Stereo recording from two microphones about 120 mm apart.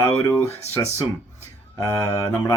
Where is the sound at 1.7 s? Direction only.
25° left (ahead or behind).